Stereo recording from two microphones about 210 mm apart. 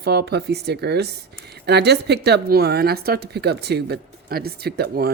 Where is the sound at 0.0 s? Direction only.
50° right (ahead or behind).